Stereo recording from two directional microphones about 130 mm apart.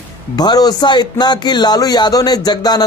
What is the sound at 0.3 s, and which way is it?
A man's voice, 30° left (ahead or behind).